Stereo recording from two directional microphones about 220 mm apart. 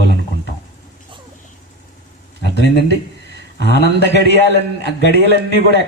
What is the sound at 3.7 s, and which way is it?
Speech, 50° left (ahead or behind).